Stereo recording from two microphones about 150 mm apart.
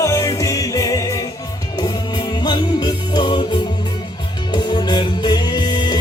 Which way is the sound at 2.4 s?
30° left (ahead or behind).